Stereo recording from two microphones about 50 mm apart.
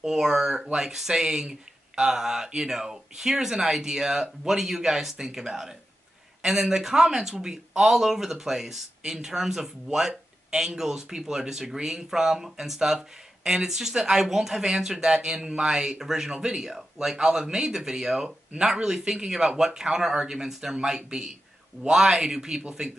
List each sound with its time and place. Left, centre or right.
0.0 s speech: centre